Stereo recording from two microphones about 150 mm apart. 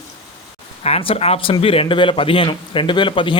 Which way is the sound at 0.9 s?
40° left (ahead or behind).